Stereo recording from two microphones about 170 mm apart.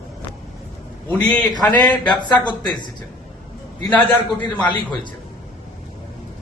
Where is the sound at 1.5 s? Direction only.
25° left (ahead or behind).